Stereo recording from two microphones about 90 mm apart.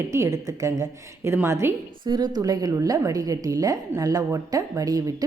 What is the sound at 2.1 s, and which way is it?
A woman's voice, 50° right (ahead or behind).